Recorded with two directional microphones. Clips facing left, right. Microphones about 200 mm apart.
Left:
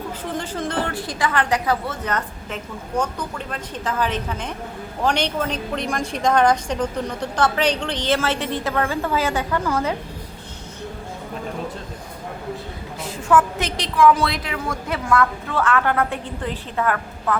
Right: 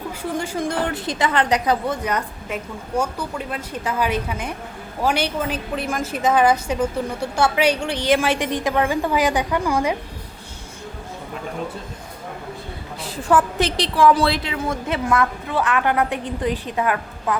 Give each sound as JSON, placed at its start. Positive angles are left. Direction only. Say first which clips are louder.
{"t": 0.2, "sound": "a woman's voice", "louder": "right 4 dB", "side_deg": -10}
{"t": 0.9, "sound": "a woman's voice", "louder": "right 2 dB", "side_deg": -20}
{"t": 13.0, "sound": "a woman's voice", "louder": "even", "side_deg": -35}